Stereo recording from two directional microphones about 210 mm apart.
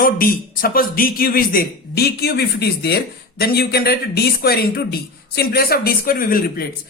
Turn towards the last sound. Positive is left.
turn(degrees=45)  # may be behind; listen again after turning